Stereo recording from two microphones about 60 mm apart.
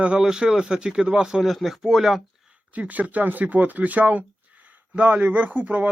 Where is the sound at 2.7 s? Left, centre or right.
Right.